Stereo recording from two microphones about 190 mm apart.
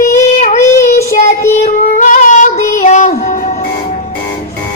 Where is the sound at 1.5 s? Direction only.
40° left (ahead or behind).